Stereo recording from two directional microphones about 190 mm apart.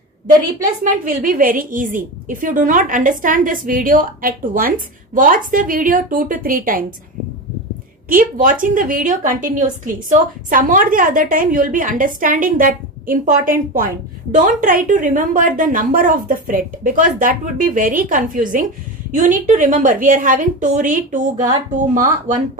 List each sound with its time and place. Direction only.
0.4 s a woman's voice: 45° right (ahead or behind)
8.1 s a woman's voice: 45° right (ahead or behind)